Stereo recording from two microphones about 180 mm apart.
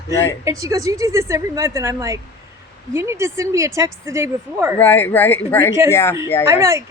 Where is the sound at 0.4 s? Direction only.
15° right (ahead or behind).